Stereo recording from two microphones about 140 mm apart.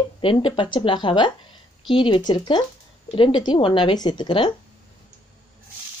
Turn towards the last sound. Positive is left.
turn(degrees=35)  # may be behind; listen again after turning